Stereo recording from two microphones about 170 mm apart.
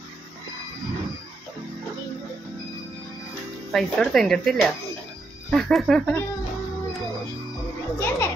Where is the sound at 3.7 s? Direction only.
Centre (ahead or behind).